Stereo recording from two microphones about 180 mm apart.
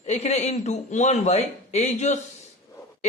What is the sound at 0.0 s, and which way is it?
A man's voice, 35° left (ahead or behind).